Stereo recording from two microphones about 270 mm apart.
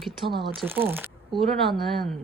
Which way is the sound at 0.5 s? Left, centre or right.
Centre.